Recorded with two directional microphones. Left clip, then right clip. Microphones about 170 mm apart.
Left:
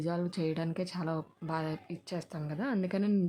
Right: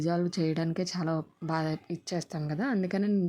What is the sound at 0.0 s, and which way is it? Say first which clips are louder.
A woman's voice: right 4 dB; 20° right (ahead or behind).